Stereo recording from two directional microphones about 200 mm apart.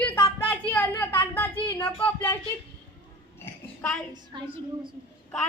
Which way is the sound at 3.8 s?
5° left (ahead or behind).